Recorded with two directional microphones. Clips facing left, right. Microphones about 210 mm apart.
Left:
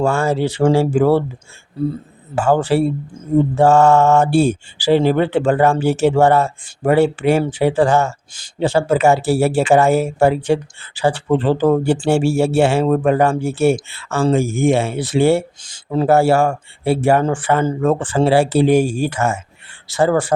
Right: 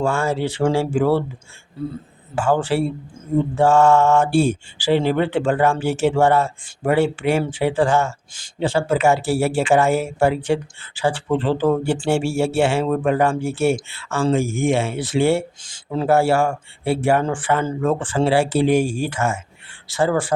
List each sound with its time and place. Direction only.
0.0 s speech: 40° left (ahead or behind)
2.3 s speech: 40° left (ahead or behind)